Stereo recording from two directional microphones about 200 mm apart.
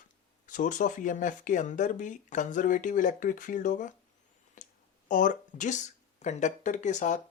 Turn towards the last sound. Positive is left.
turn(degrees=35)  # may be behind; listen again after turning